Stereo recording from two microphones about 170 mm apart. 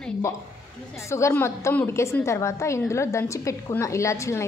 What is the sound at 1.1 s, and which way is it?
A woman's voice, 15° left (ahead or behind).